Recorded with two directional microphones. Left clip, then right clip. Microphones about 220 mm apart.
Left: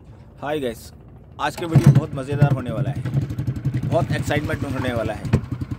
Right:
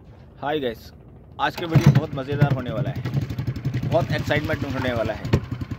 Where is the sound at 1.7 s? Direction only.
40° right (ahead or behind).